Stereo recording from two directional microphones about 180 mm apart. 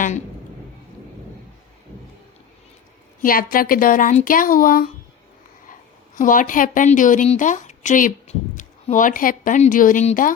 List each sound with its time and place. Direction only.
3.2 s a woman's voice: 55° left (ahead or behind)
6.1 s a woman's voice: 50° left (ahead or behind)